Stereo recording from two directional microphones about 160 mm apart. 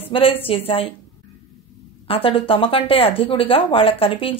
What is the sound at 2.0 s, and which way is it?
A woman's voice, 35° left (ahead or behind).